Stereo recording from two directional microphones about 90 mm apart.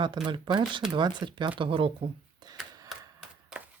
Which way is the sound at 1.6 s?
80° right.